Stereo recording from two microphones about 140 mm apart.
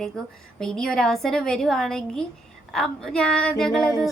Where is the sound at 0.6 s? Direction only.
5° left (ahead or behind).